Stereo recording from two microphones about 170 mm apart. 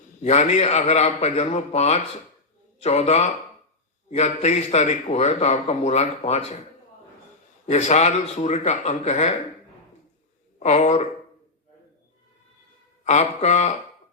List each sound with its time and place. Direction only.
0.2 s a man's voice: 40° left (ahead or behind)
7.7 s speech: 45° left (ahead or behind)
10.6 s speech: 45° left (ahead or behind)
13.1 s speech: 40° left (ahead or behind)